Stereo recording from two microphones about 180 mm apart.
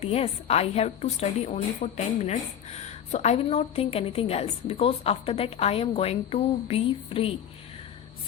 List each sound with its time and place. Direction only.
0.0 s a woman's voice: 35° left (ahead or behind)